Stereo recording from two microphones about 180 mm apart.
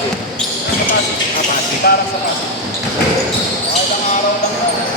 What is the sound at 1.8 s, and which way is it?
Speech, 60° left (ahead or behind).